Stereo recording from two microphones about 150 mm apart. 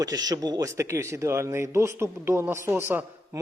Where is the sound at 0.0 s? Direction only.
25° right (ahead or behind).